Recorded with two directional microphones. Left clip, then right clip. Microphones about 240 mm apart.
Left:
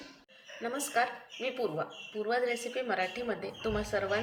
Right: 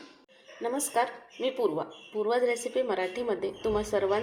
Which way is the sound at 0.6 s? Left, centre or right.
Centre.